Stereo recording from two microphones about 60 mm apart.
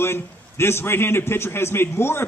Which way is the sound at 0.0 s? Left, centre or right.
Left.